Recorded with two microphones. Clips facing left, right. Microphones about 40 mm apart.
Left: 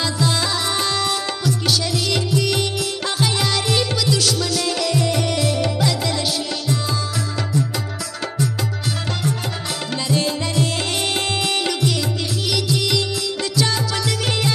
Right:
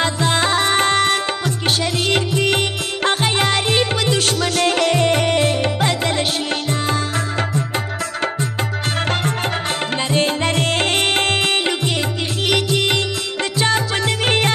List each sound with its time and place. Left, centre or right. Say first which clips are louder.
0.0 s music: right 3 dB; right
9.9 s music: right 2 dB; right